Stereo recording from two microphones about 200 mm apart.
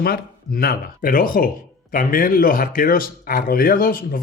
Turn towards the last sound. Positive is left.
turn(degrees=45)  # may be behind; listen again after turning